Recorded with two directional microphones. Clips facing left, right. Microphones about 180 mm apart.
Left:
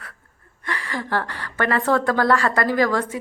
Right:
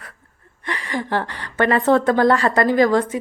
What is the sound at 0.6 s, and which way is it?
A woman's voice, 20° right (ahead or behind).